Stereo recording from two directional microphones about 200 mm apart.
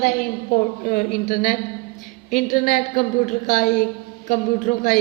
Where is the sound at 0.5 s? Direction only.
40° left (ahead or behind).